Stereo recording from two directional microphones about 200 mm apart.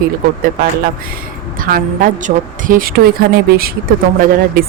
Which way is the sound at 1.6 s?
45° right (ahead or behind).